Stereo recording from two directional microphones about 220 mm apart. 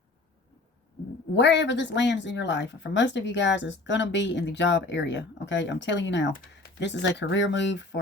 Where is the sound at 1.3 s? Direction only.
55° left (ahead or behind).